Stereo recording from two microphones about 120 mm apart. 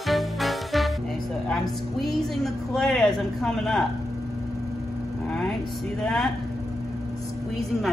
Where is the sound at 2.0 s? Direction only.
5° left (ahead or behind).